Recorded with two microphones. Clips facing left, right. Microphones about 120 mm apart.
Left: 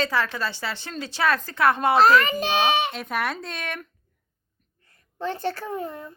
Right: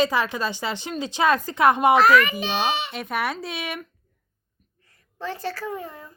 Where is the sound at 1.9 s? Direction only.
30° left (ahead or behind); by 2.9 s 55° left (ahead or behind).